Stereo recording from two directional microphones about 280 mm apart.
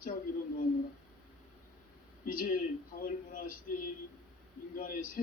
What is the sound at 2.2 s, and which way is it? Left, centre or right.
Speech, left.